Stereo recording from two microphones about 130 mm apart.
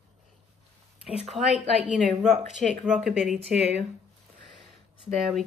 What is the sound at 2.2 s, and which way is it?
Speech, 60° right (ahead or behind).